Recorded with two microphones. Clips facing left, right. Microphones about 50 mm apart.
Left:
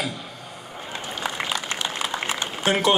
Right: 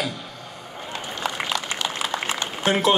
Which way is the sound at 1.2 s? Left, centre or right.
Centre.